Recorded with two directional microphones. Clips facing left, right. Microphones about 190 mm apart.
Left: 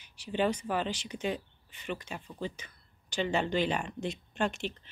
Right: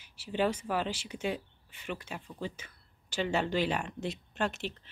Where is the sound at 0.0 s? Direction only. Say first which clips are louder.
Even; 5° right (ahead or behind).